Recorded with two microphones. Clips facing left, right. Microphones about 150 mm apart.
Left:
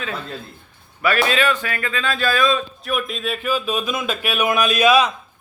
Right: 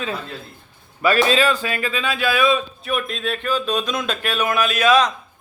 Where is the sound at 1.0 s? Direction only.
35° right (ahead or behind).